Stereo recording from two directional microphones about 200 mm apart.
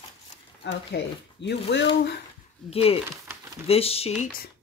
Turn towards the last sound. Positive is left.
turn(degrees=30)  # may be behind; listen again after turning